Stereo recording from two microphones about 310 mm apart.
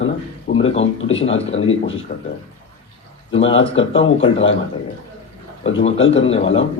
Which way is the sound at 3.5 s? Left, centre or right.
Centre.